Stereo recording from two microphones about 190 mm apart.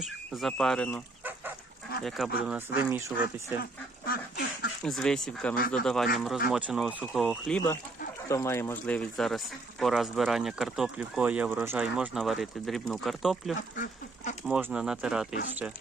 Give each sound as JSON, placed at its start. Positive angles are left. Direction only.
{"t": 0.0, "sound": "speech", "side_deg": 0}
{"t": 2.0, "sound": "speech", "side_deg": 0}
{"t": 2.5, "sound": "speech", "side_deg": -10}
{"t": 3.6, "sound": "duck", "side_deg": 50}
{"t": 4.8, "sound": "speech", "side_deg": 5}
{"t": 5.5, "sound": "speech", "side_deg": 50}
{"t": 5.8, "sound": "speech", "side_deg": 0}
{"t": 8.3, "sound": "speech", "side_deg": 15}
{"t": 13.7, "sound": "a sound", "side_deg": 45}
{"t": 14.4, "sound": "speech", "side_deg": -5}